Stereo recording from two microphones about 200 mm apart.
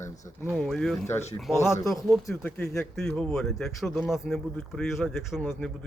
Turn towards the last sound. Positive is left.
turn(degrees=0)  # may be behind; listen again after turning